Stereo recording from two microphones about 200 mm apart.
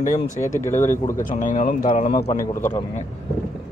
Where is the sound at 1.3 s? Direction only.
40° left (ahead or behind).